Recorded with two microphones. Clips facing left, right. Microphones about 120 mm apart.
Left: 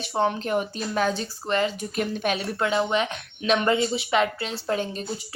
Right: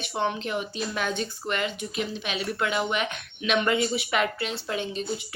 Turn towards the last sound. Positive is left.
turn(degrees=40)  # may be behind; listen again after turning